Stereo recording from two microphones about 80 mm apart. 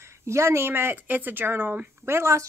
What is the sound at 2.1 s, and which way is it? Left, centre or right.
Speech, right.